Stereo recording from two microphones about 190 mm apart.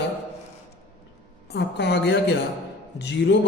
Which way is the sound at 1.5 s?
65° left (ahead or behind).